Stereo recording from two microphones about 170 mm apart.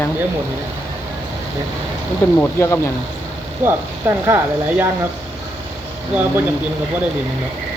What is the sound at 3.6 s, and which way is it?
Speech, 15° right (ahead or behind).